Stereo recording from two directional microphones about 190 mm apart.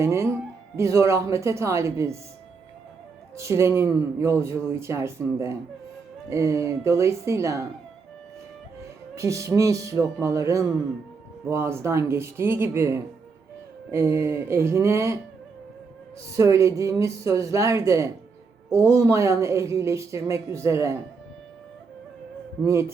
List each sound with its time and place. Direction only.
0.0 s speech: 15° right (ahead or behind)
3.3 s speech: 15° right (ahead or behind)
9.1 s speech: 15° right (ahead or behind)
16.3 s speech: 15° right (ahead or behind)
22.6 s speech: 15° right (ahead or behind)